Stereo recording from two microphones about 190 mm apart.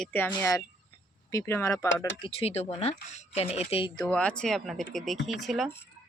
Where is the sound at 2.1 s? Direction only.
30° left (ahead or behind).